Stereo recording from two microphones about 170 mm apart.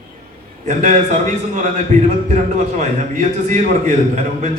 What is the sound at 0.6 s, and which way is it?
A man's voice, 45° right (ahead or behind).